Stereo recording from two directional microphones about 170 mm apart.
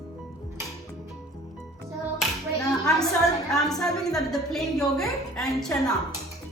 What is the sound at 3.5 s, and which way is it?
A woman's voice, 5° left (ahead or behind).